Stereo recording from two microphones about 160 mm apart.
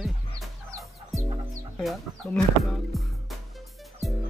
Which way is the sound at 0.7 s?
20° right (ahead or behind).